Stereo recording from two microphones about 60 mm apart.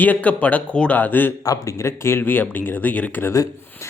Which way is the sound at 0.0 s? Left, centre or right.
Left.